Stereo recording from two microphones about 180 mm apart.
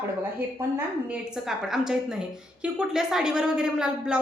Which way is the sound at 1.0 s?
5° right (ahead or behind).